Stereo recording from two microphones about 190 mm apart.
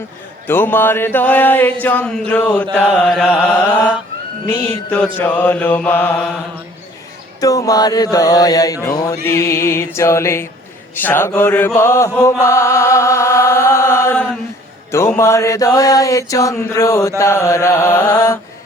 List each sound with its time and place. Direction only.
0.4 s mantra: 10° left (ahead or behind)
7.4 s mantra: 20° left (ahead or behind)
10.9 s chant: 10° left (ahead or behind)
14.9 s mantra: 15° left (ahead or behind)